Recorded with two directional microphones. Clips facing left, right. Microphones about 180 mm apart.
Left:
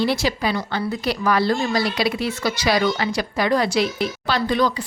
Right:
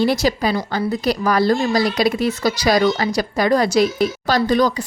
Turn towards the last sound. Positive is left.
turn(degrees=-40)  # may be behind; listen again after turning